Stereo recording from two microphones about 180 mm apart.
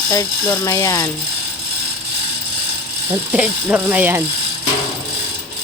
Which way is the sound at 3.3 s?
5° right (ahead or behind).